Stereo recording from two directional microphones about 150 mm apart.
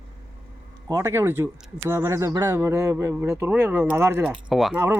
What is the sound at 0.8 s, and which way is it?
Speech, 15° right (ahead or behind).